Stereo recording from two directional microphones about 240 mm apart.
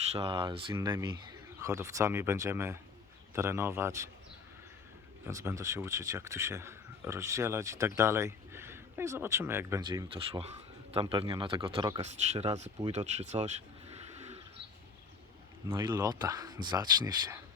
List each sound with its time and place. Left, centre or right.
0.1 s speech: right
5.3 s speech: centre
12.1 s speech: right
13.1 s a sound: right
15.7 s speech: centre